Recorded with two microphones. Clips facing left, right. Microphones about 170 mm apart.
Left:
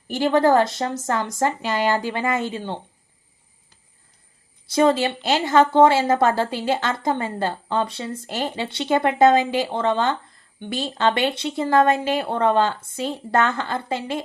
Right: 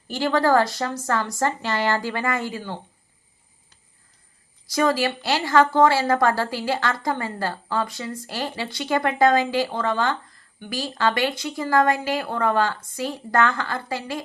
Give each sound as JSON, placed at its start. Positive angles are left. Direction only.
{"t": 0.1, "sound": "a woman's voice", "side_deg": 20}
{"t": 4.7, "sound": "a woman's voice", "side_deg": 25}